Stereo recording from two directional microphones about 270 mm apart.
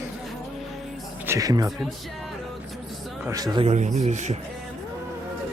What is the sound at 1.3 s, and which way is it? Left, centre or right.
Speech, centre.